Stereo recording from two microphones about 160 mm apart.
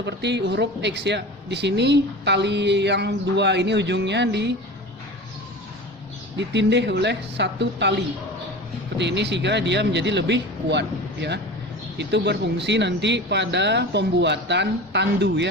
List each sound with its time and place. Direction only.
0.0 s speech: 90° right
6.3 s speech: 90° right